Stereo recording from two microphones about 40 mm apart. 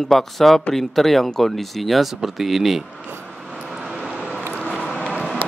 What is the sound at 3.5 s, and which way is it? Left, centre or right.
Vehicle, centre.